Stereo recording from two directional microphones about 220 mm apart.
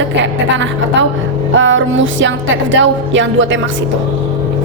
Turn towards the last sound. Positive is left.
turn(degrees=-60)  # may be behind; listen again after turning